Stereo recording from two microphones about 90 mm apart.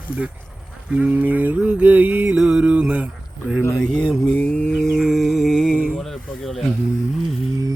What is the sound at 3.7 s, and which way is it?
Speech, 5° left (ahead or behind).